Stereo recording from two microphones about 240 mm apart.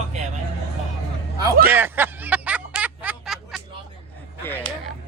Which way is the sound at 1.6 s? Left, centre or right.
Centre.